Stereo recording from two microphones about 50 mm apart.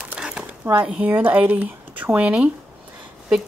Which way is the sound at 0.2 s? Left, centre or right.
Right.